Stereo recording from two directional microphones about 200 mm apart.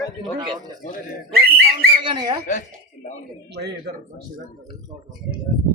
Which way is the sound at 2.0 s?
25° right (ahead or behind).